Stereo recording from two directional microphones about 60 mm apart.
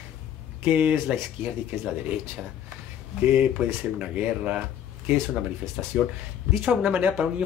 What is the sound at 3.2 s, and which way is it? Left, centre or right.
Speech, right.